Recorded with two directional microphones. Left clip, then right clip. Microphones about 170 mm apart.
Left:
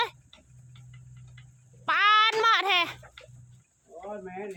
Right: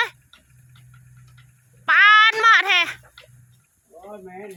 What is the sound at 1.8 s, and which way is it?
Music, 10° left (ahead or behind).